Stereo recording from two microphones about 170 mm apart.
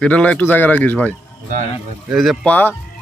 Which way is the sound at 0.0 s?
10° left (ahead or behind).